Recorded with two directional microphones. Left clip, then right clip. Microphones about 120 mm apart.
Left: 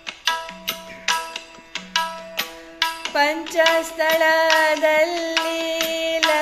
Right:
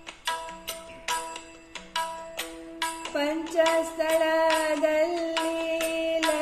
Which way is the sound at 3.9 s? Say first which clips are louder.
Left 6 dB; 25° right (ahead or behind).